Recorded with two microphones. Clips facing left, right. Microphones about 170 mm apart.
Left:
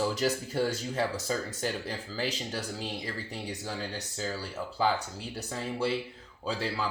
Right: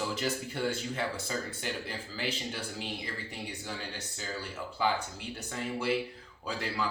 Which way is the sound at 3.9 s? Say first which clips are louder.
Left 4 dB; 35° left (ahead or behind).